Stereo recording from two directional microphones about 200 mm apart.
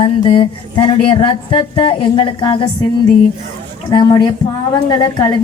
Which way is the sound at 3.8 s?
20° left (ahead or behind).